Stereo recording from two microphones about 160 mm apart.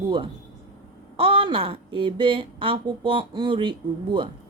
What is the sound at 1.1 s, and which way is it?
Speech, 35° right (ahead or behind).